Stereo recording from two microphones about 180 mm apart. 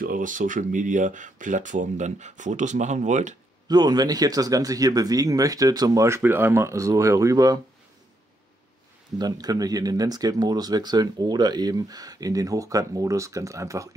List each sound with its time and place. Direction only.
0.0 s speech: 50° right (ahead or behind)
3.6 s speech: 20° right (ahead or behind)
9.2 s speech: 20° right (ahead or behind)